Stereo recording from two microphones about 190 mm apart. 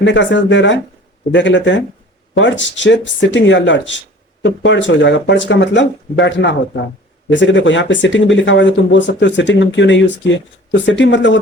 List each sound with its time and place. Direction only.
0.0 s speech: 70° left (ahead or behind)